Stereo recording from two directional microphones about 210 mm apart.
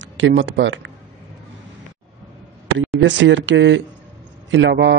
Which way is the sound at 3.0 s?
60° right (ahead or behind).